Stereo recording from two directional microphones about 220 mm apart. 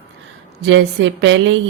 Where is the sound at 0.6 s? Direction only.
55° right (ahead or behind).